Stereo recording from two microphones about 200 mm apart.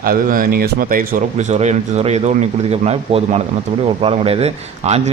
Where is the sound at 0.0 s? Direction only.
45° right (ahead or behind).